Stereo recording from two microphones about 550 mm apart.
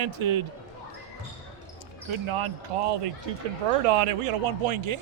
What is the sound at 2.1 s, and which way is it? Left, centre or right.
Speech, right.